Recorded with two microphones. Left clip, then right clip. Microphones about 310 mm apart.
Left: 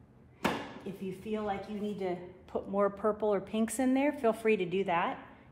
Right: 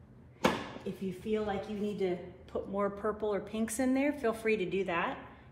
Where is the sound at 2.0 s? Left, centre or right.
Left.